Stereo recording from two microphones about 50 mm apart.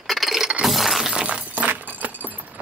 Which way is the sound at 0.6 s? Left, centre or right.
Centre.